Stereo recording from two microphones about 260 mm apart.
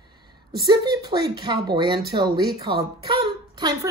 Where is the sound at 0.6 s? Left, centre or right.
Centre.